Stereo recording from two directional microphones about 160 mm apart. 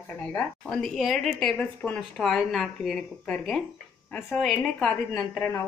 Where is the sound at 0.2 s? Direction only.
5° left (ahead or behind).